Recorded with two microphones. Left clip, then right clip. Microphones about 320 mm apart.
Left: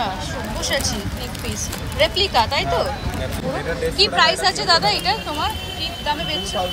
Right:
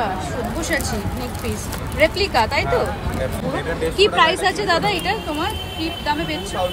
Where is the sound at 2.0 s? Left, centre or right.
Centre.